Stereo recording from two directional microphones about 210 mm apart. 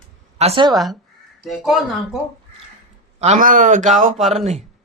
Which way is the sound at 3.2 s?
35° right (ahead or behind).